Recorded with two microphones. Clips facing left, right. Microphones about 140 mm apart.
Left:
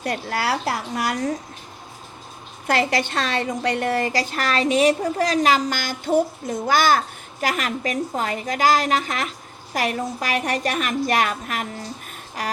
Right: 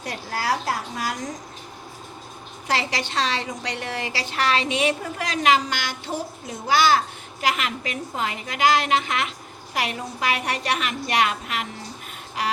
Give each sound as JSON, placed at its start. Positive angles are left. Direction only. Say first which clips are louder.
{"t": 0.0, "sound": "a woman's voice", "louder": "left 4 dB", "side_deg": 65}
{"t": 2.6, "sound": "a woman's voice", "louder": "left 5 dB", "side_deg": 50}
{"t": 12.4, "sound": "a sound", "louder": "right 1 dB", "side_deg": 45}